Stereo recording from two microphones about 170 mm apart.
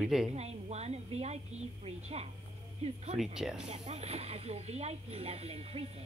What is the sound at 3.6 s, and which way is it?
Speech, 40° right (ahead or behind).